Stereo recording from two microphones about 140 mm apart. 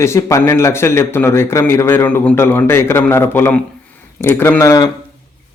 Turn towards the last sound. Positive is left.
turn(degrees=20)  # may be behind; listen again after turning